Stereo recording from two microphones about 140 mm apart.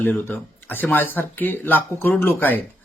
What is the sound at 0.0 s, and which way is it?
Speech, 15° left (ahead or behind).